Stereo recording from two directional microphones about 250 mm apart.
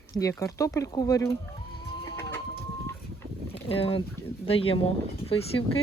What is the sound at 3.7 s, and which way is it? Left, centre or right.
Speech, left.